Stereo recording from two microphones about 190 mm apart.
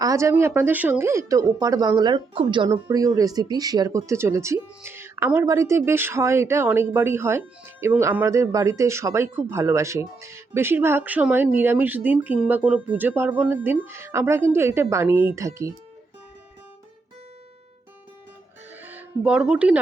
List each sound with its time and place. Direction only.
0.0 s speech: 15° right (ahead or behind)
18.7 s music: 10° right (ahead or behind)